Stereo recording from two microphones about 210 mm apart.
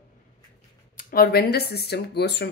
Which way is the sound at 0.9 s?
45° left (ahead or behind).